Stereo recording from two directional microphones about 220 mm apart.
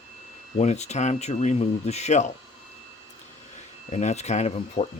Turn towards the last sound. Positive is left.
turn(degrees=30)  # may be behind; listen again after turning